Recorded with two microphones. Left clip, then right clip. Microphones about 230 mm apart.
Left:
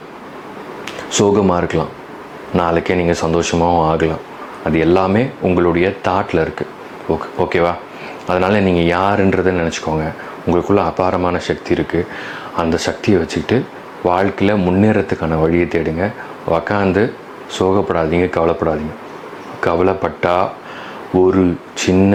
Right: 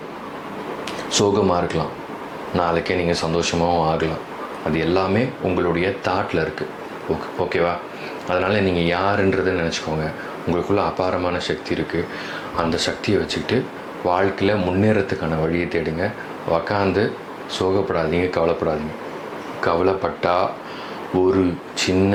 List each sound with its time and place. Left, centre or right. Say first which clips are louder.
1.1 s speech: left 4 dB; left